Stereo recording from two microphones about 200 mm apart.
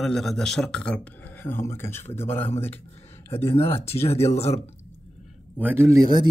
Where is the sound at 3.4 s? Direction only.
30° left (ahead or behind).